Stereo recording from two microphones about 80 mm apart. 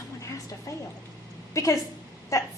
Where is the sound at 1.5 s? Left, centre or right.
Left.